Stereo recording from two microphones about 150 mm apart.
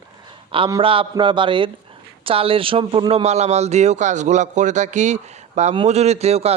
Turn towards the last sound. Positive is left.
turn(degrees=-45)  # may be behind; listen again after turning